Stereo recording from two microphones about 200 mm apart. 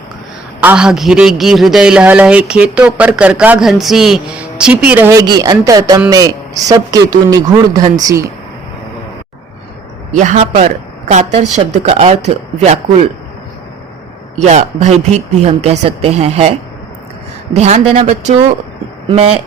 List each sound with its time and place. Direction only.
0.6 s a man's voice: 5° right (ahead or behind)
10.2 s speech: 35° right (ahead or behind)
14.3 s a man's voice: 35° right (ahead or behind)